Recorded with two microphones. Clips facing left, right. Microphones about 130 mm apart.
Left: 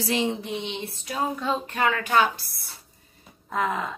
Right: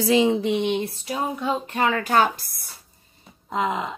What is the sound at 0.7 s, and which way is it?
Speech, 40° right (ahead or behind).